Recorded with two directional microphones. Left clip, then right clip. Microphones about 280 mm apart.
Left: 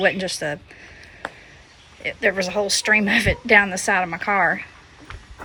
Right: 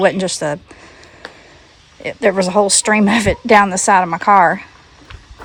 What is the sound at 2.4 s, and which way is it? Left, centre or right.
Speech, centre.